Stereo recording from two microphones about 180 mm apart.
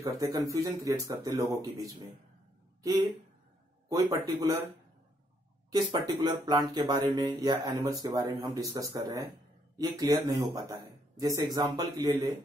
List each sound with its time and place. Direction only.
0.0 s speech: 15° right (ahead or behind)
5.7 s speech: 20° right (ahead or behind)